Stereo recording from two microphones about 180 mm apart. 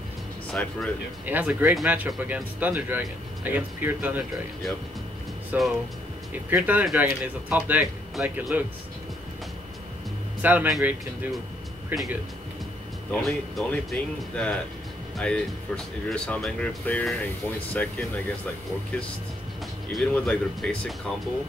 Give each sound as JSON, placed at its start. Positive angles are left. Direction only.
{"t": 0.5, "sound": "speech", "side_deg": 5}
{"t": 1.2, "sound": "speech", "side_deg": -10}
{"t": 5.5, "sound": "speech", "side_deg": -10}
{"t": 10.4, "sound": "speech", "side_deg": -10}
{"t": 19.9, "sound": "speech", "side_deg": 5}